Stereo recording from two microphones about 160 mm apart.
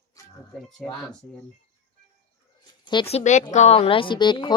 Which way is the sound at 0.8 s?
5° left (ahead or behind).